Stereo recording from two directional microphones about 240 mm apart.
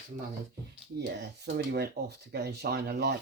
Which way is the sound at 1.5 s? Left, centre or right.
Right.